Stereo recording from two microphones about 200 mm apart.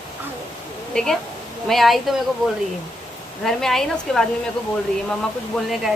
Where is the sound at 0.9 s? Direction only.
5° left (ahead or behind).